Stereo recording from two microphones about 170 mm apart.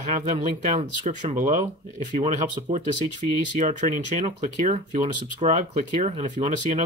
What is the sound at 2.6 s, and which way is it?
Speech, 30° right (ahead or behind).